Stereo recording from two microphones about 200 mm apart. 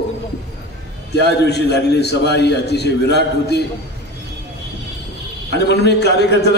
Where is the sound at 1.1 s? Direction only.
55° left (ahead or behind).